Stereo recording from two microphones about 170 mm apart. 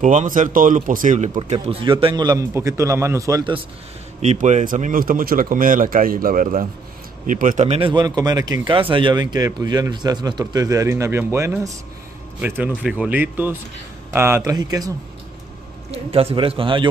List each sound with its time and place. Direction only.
0.0 s speech: 45° right (ahead or behind); by 3.6 s 25° right (ahead or behind)
4.2 s speech: 45° right (ahead or behind); by 14.9 s 20° right (ahead or behind)
15.9 s speech: 35° right (ahead or behind)